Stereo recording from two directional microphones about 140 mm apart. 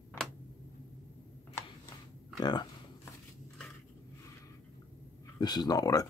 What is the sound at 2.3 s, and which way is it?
Speech, 30° left (ahead or behind).